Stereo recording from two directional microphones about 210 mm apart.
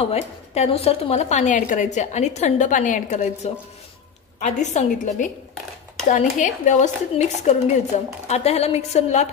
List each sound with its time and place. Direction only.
0.0 s a woman's voice: 30° left (ahead or behind)